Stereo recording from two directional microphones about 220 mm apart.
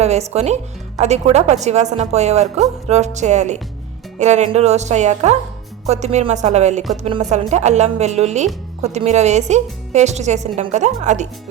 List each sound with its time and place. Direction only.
0.0 s speech: 30° right (ahead or behind)